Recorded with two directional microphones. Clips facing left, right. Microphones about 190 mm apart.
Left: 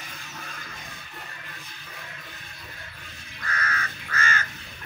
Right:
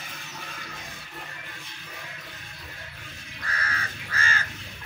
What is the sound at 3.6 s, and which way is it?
Crow, 30° right (ahead or behind).